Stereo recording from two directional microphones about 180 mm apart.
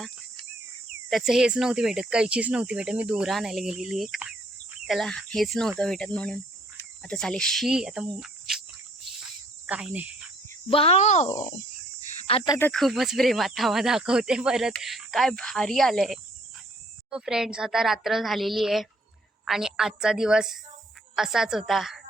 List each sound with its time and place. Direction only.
1.1 s speech: centre (ahead or behind)
7.0 s cricket: 5° left (ahead or behind)
10.7 s speech: 30° left (ahead or behind)
12.5 s speech: 5° left (ahead or behind)